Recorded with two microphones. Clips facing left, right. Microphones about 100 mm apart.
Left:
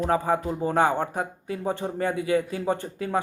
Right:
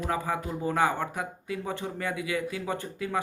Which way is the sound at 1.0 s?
40° left (ahead or behind).